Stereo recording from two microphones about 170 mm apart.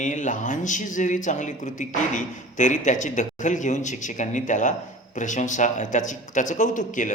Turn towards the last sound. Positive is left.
turn(degrees=50)  # may be behind; listen again after turning